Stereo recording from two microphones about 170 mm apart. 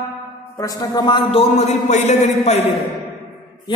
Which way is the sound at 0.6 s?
20° left (ahead or behind).